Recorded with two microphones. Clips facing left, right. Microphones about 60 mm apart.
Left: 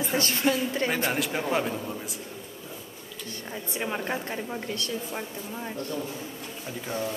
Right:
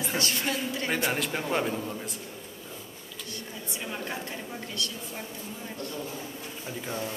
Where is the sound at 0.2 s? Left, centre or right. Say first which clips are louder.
Left 6 dB; left.